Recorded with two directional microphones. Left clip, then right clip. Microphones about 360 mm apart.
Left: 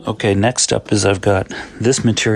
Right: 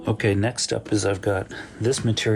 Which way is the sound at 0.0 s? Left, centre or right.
Centre.